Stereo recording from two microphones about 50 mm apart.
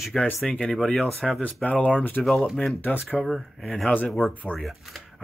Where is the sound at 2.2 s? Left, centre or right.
Centre.